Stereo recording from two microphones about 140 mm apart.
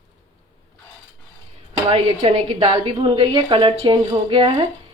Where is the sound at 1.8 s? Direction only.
45° right (ahead or behind).